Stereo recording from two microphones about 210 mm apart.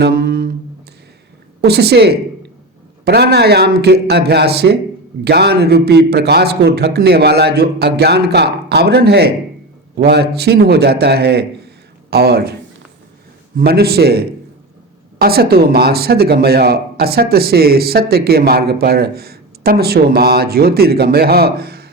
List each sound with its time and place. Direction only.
0.0 s a sound: 45° right (ahead or behind)
1.6 s speech: 50° right (ahead or behind)
13.6 s speech: 50° right (ahead or behind)